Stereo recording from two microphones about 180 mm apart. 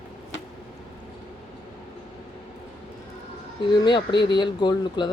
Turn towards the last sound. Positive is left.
turn(degrees=25)  # may be behind; listen again after turning